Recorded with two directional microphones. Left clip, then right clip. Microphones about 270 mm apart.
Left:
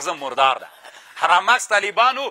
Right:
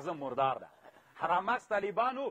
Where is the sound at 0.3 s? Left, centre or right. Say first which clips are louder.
Left 14 dB; centre.